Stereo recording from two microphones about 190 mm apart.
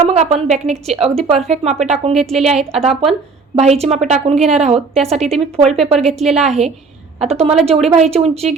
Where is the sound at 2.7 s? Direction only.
30° right (ahead or behind).